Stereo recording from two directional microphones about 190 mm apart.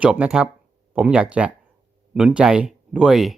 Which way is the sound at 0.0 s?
5° right (ahead or behind).